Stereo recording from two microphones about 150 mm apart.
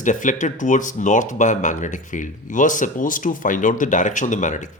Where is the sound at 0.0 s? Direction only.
55° left (ahead or behind).